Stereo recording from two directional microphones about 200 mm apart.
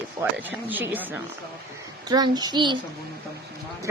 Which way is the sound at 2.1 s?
20° right (ahead or behind).